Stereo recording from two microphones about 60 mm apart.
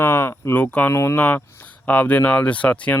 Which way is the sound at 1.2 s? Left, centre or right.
Left.